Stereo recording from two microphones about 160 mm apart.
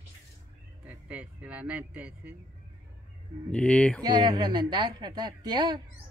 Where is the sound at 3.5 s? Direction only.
5° left (ahead or behind).